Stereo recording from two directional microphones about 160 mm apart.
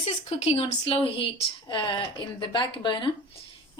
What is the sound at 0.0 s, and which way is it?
A woman's voice, 40° left (ahead or behind).